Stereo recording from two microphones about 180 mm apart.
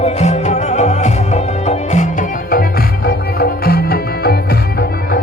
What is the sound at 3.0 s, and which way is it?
Music, 60° left (ahead or behind).